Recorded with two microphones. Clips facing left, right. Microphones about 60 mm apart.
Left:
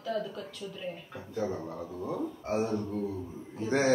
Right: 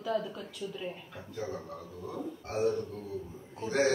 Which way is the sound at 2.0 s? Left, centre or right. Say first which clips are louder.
Left 5 dB; left.